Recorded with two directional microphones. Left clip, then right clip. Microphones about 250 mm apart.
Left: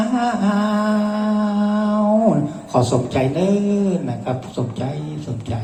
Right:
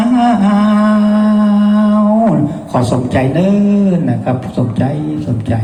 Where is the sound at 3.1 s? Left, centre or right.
Right.